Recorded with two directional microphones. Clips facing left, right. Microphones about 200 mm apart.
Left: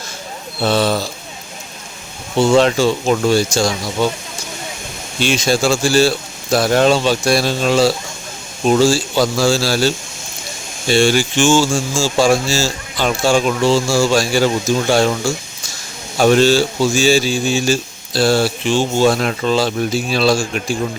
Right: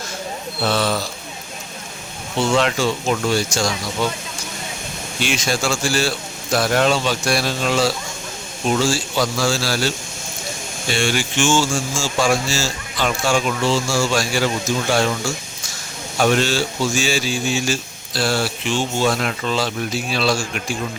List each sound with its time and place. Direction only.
0.6 s speech: 30° left (ahead or behind)
2.4 s a man's voice: 35° left (ahead or behind)
5.2 s a man's voice: 30° left (ahead or behind)
10.9 s a man's voice: 35° left (ahead or behind)
16.1 s a man's voice: 35° left (ahead or behind)